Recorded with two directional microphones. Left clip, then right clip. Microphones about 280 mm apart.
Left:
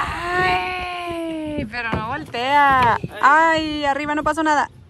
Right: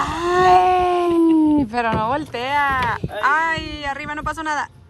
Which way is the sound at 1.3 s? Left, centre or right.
Centre.